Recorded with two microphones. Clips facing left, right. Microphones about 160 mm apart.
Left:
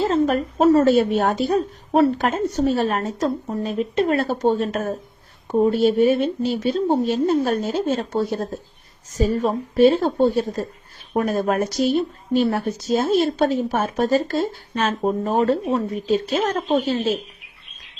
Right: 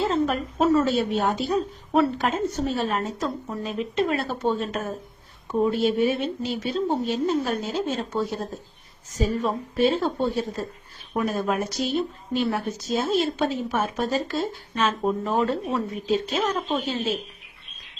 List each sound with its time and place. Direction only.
0.0 s a sound: 40° left (ahead or behind)
0.7 s speech: 45° left (ahead or behind)
3.6 s speech: 45° left (ahead or behind)
7.1 s speech: 50° left (ahead or behind)